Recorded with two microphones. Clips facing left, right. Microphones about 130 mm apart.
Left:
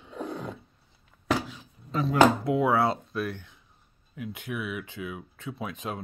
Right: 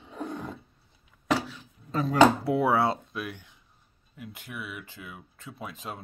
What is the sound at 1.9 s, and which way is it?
Speech, 40° right (ahead or behind).